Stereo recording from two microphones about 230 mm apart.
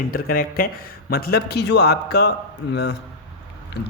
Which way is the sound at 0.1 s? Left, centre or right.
Left.